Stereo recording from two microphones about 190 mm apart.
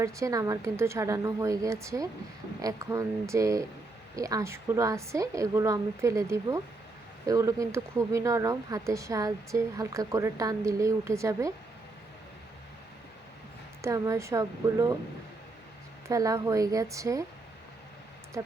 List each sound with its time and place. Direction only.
0.0 s speech: 15° right (ahead or behind)
13.8 s speech: 15° right (ahead or behind)
16.0 s speech: 15° right (ahead or behind)
18.4 s speech: 15° right (ahead or behind)